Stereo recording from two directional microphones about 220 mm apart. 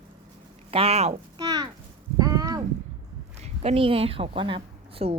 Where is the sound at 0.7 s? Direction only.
25° right (ahead or behind).